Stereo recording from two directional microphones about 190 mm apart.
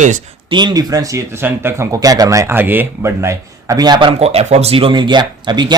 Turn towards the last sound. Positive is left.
turn(degrees=-25)  # may be behind; listen again after turning